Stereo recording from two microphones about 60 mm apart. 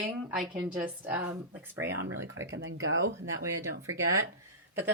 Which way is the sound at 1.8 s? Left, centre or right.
Right.